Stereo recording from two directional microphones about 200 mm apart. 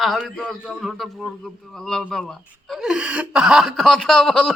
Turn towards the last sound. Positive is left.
turn(degrees=5)  # may be behind; listen again after turning